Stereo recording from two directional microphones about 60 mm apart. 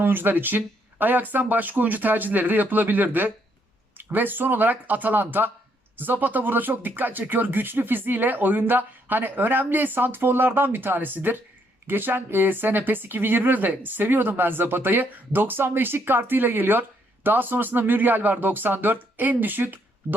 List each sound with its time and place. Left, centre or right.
0.0 s speech: right